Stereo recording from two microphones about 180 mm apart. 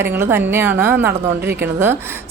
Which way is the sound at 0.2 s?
10° right (ahead or behind).